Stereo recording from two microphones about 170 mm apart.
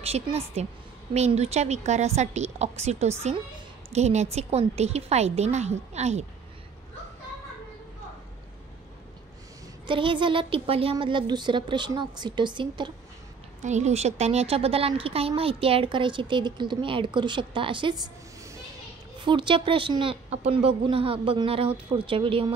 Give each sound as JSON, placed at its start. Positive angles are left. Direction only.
{"t": 0.0, "sound": "a woman's voice", "side_deg": -35}
{"t": 9.8, "sound": "a woman's voice", "side_deg": -30}
{"t": 13.6, "sound": "a woman's voice", "side_deg": -45}